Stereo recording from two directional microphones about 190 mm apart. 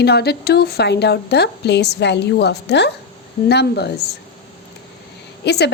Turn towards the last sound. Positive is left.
turn(degrees=60)  # may be behind; listen again after turning